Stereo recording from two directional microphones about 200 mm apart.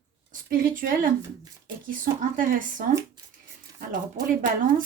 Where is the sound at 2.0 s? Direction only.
40° right (ahead or behind).